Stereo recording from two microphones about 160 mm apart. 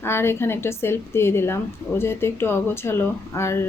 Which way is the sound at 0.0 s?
15° left (ahead or behind).